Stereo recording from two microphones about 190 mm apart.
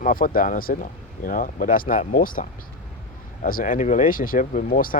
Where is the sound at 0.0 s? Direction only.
45° left (ahead or behind).